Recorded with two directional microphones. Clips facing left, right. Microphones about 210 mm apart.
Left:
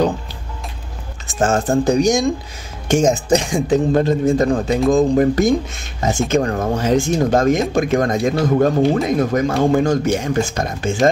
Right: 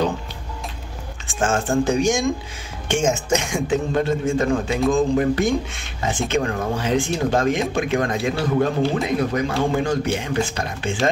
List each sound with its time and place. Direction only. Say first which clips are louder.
1.2 s speech: left 4 dB; 40° left (ahead or behind)